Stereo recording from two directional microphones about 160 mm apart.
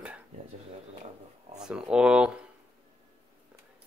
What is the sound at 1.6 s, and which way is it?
Speech, 5° right (ahead or behind).